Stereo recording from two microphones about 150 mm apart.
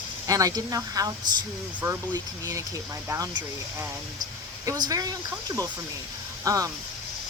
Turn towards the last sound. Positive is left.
turn(degrees=-25)  # may be behind; listen again after turning